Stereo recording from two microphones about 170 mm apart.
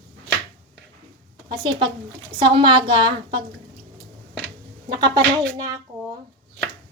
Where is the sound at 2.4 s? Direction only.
30° right (ahead or behind).